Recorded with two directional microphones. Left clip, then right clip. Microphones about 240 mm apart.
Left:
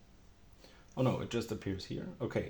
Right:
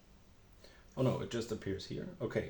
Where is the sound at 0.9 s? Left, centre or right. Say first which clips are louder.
Left 1 dB; left.